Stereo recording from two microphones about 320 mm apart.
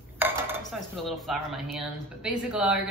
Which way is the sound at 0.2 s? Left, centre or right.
Centre.